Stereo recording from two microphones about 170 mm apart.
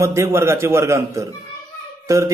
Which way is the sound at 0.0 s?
15° right (ahead or behind).